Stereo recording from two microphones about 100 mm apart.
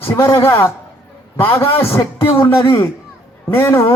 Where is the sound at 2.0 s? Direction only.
25° left (ahead or behind).